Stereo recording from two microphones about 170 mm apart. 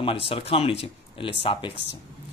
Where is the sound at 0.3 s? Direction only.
30° left (ahead or behind).